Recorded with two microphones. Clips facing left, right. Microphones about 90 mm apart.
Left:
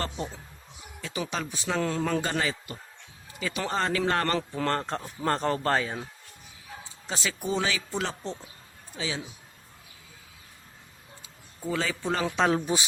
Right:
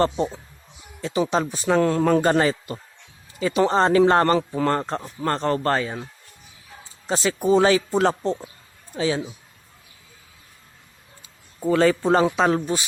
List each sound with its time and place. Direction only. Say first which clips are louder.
1.0 s speech: right 10 dB; 35° right (ahead or behind)
4.4 s a man's voice: right 6 dB; 10° right (ahead or behind)
5.2 s speech: right 4 dB; 5° left (ahead or behind)
7.1 s speech: right 11 dB; 35° right (ahead or behind)
11.7 s speech: right 11 dB; 55° right (ahead or behind)
12.4 s speech: right 4 dB; 5° right (ahead or behind)